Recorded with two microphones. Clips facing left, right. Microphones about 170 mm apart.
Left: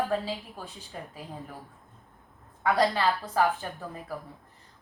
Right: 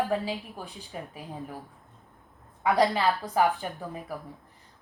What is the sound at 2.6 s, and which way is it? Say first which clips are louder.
A woman's voice: right 1 dB; 15° right (ahead or behind).